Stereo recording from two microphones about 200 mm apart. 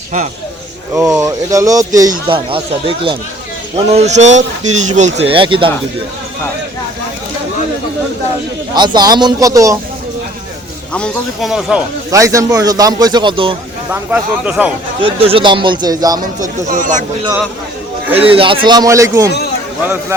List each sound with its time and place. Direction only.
0.9 s a man's voice: 15° right (ahead or behind)
8.7 s a man's voice: 20° right (ahead or behind)
10.9 s a man's voice: centre (ahead or behind)
12.1 s a man's voice: 15° right (ahead or behind)
13.9 s speech: 5° right (ahead or behind)
15.0 s a man's voice: 25° right (ahead or behind)
16.4 s speech: 40° right (ahead or behind)
18.1 s a man's voice: 30° right (ahead or behind)